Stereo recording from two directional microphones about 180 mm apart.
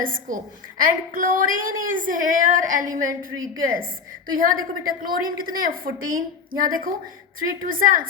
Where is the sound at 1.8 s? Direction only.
50° right (ahead or behind).